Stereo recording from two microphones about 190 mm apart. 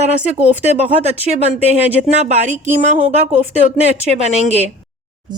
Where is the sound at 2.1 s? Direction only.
35° right (ahead or behind).